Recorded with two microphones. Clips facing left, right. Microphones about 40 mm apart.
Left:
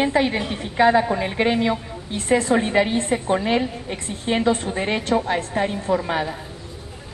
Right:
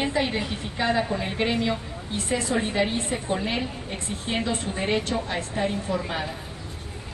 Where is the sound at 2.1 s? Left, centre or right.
Left.